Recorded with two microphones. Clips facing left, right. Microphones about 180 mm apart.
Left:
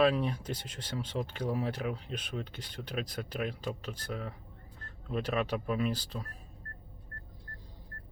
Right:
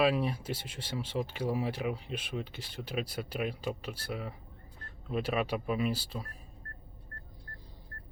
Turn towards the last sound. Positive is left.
turn(degrees=-10)  # may be behind; listen again after turning